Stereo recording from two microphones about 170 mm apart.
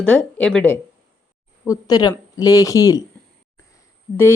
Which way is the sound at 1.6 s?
20° left (ahead or behind).